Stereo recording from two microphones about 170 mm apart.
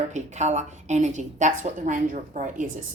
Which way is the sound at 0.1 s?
45° right (ahead or behind).